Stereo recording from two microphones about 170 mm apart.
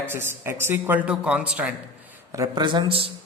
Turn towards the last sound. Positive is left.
turn(degrees=-35)  # may be behind; listen again after turning